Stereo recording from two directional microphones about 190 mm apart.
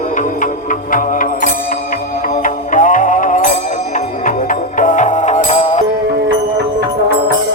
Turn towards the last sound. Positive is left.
turn(degrees=40)  # may be behind; listen again after turning